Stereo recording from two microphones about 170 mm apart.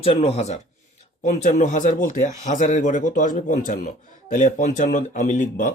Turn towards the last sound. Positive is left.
turn(degrees=45)  # may be behind; listen again after turning